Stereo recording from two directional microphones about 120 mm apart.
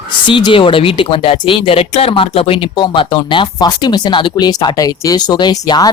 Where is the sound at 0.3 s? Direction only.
40° left (ahead or behind).